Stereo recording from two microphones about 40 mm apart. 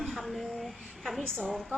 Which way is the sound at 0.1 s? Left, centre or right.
Centre.